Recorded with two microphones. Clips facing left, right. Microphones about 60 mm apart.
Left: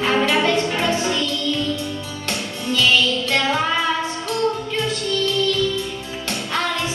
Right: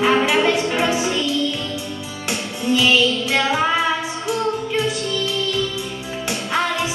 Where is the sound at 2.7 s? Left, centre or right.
Centre.